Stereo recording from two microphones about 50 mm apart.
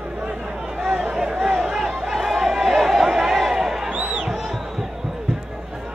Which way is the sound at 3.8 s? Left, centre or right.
Centre.